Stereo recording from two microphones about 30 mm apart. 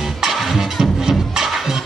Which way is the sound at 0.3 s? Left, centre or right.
Centre.